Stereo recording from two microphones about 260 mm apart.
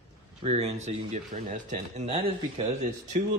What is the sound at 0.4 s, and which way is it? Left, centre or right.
Speech, right.